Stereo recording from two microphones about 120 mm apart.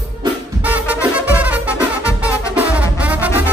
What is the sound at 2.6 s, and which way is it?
Brass instrument, 10° right (ahead or behind).